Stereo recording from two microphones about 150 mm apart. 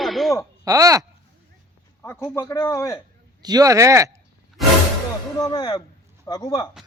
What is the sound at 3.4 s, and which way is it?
Speech, 25° right (ahead or behind).